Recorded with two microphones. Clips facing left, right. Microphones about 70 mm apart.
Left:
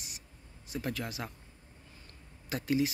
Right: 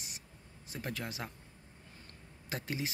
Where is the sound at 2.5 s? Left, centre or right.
Right.